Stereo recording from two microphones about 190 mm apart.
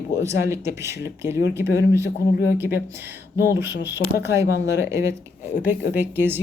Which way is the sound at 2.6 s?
10° right (ahead or behind).